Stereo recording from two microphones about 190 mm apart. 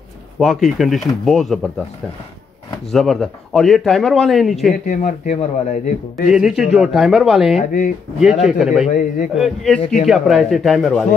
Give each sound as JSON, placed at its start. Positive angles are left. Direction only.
{"t": 0.4, "sound": "a man's voice", "side_deg": 0}
{"t": 2.9, "sound": "a man's voice", "side_deg": 0}
{"t": 4.8, "sound": "a man's voice", "side_deg": 40}
{"t": 6.3, "sound": "a man's voice", "side_deg": 0}
{"t": 8.8, "sound": "a man's voice", "side_deg": 40}
{"t": 9.3, "sound": "a man's voice", "side_deg": 0}